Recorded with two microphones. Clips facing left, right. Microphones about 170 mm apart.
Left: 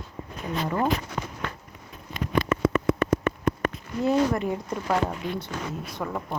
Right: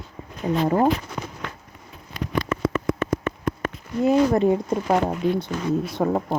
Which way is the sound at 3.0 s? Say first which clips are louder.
Left 1 dB; 65° left (ahead or behind).